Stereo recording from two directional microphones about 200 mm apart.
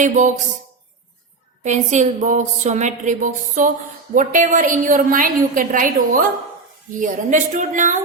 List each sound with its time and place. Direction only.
0.0 s a woman's voice: 40° right (ahead or behind)
1.6 s a woman's voice: 35° right (ahead or behind)